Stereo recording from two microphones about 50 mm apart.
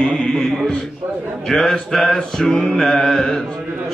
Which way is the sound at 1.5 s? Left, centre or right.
Centre.